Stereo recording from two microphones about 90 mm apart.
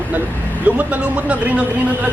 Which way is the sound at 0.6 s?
15° right (ahead or behind).